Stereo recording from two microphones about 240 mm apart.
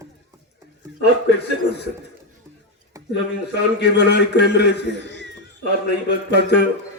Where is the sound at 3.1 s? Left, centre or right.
Left.